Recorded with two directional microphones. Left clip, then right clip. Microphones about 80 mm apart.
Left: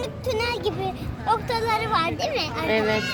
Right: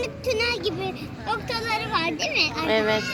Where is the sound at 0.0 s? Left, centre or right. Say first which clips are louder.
Right 1 dB; left.